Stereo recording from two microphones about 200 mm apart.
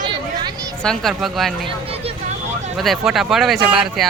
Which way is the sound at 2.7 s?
Centre (ahead or behind).